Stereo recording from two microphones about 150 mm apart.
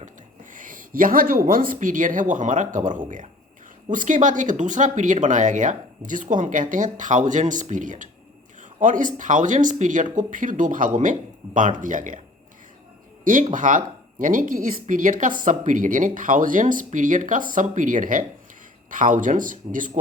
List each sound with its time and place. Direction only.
0.5 s speech: 65° right (ahead or behind)
13.5 s speech: 60° right (ahead or behind)